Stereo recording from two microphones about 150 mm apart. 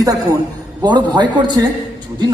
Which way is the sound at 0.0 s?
25° right (ahead or behind).